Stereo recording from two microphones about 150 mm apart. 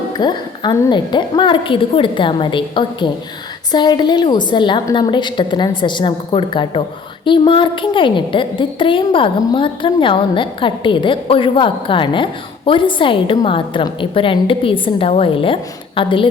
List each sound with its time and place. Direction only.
0.1 s a woman's voice: 30° left (ahead or behind)